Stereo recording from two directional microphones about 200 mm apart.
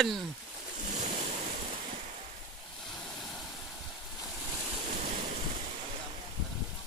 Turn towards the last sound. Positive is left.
turn(degrees=-35)  # may be behind; listen again after turning